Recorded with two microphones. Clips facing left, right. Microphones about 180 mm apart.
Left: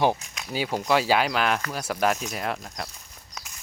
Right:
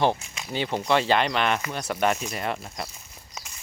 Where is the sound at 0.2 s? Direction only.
Centre (ahead or behind).